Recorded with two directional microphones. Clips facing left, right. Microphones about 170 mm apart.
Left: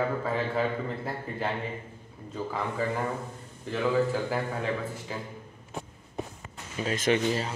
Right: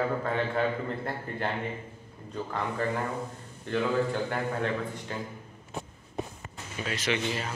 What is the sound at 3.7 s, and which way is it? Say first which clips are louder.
A man's voice: left 1 dB; 5° left (ahead or behind).